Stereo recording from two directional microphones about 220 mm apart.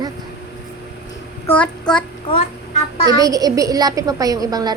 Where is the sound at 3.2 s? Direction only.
15° right (ahead or behind).